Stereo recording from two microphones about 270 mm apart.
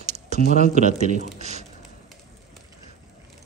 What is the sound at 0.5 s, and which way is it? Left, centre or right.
Speech, right.